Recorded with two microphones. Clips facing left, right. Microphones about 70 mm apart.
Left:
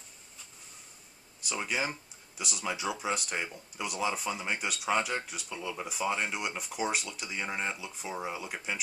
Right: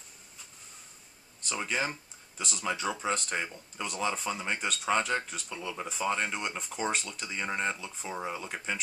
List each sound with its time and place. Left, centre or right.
1.4 s speech: centre